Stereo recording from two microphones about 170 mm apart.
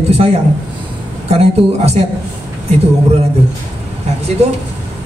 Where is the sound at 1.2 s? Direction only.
40° right (ahead or behind).